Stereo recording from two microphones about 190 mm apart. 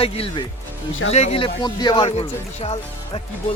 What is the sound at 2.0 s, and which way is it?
Speech, 35° left (ahead or behind).